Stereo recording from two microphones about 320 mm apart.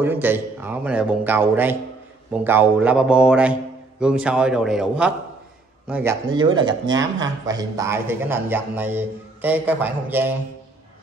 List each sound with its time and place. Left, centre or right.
0.0 s speech: centre